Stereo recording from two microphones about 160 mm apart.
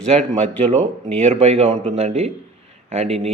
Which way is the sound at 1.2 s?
40° right (ahead or behind).